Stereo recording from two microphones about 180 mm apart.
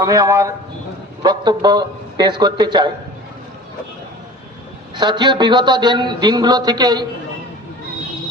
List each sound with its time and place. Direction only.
0.0 s speech: 20° right (ahead or behind)
4.9 s speech: 25° right (ahead or behind)